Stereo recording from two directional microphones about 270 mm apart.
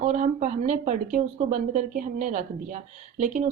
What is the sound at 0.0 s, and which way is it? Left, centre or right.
A woman's voice, right.